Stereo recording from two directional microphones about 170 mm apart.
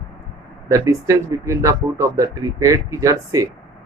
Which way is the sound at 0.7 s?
20° right (ahead or behind).